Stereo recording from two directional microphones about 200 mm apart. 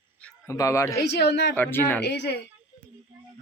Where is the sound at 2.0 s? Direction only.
55° left (ahead or behind).